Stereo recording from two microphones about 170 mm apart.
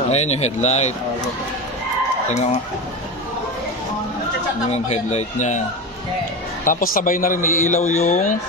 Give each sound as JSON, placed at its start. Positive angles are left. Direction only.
{"t": 0.1, "sound": "a man's voice", "side_deg": 40}
{"t": 4.6, "sound": "a man's voice", "side_deg": 40}
{"t": 6.6, "sound": "a man's voice", "side_deg": 55}